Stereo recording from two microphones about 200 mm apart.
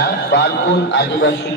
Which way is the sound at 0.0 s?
65° left (ahead or behind).